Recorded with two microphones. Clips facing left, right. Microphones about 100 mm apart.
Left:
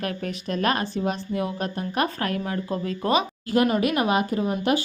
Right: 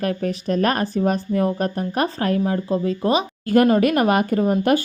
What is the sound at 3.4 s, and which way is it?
Speech, 50° right (ahead or behind).